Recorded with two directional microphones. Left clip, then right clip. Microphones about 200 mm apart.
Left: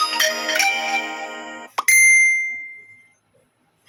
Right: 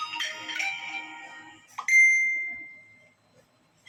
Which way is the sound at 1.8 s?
50° left (ahead or behind).